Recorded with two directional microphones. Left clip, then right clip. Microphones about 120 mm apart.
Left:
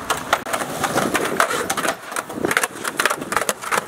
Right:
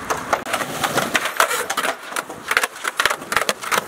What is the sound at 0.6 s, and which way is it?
Bird, 10° right (ahead or behind).